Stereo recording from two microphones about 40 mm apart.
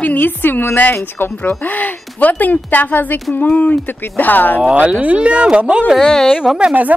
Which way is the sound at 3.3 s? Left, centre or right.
Left.